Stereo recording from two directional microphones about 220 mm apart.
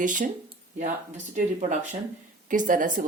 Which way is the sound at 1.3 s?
35° right (ahead or behind).